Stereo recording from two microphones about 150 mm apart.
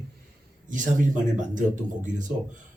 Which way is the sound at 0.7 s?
55° right (ahead or behind).